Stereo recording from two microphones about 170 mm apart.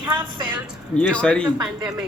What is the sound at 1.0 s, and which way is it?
Speech, 5° left (ahead or behind).